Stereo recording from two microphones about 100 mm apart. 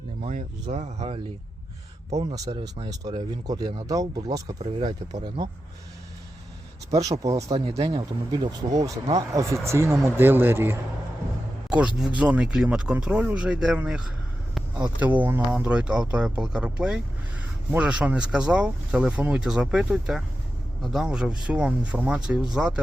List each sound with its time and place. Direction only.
0.7 s speech: 90° right
2.1 s speech: 35° right (ahead or behind)
2.6 s speech: 60° right (ahead or behind)
3.0 s speech: 45° right (ahead or behind)
6.9 s speech: 35° right (ahead or behind)
7.5 s speech: 90° right
7.9 s speech: 50° right (ahead or behind); by 10.8 s 20° right (ahead or behind)
11.9 s speech: 10° right (ahead or behind)